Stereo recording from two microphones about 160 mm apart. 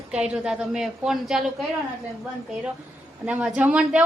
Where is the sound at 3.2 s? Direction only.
5° right (ahead or behind).